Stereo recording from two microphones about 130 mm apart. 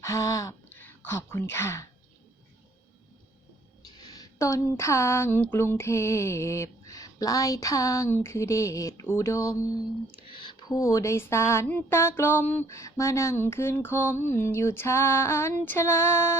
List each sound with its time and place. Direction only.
0.0 s speech: 25° left (ahead or behind)
3.9 s speech: 30° left (ahead or behind)
10.2 s speech: 40° left (ahead or behind); by 16.4 s 20° left (ahead or behind)